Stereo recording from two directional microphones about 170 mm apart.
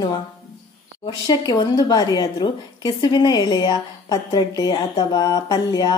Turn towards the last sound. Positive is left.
turn(degrees=20)  # may be behind; listen again after turning